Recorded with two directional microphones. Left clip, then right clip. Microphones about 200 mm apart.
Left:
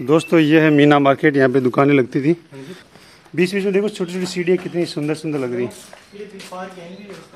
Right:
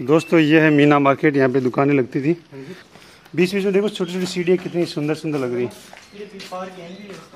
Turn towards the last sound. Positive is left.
turn(degrees=-5)  # may be behind; listen again after turning